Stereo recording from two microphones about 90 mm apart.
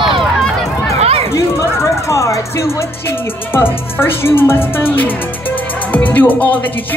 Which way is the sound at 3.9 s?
25° left (ahead or behind).